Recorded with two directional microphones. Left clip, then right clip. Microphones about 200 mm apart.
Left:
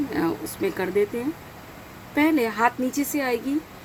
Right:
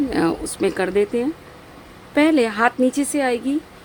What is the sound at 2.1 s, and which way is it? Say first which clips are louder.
Speech: right 5 dB; 45° right (ahead or behind).